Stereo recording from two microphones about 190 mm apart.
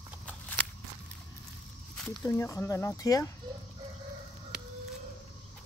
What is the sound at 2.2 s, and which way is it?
Speech, 15° left (ahead or behind).